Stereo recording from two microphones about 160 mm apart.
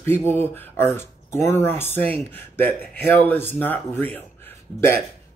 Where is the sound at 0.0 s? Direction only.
15° left (ahead or behind).